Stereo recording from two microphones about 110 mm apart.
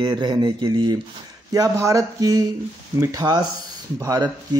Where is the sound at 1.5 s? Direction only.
30° right (ahead or behind).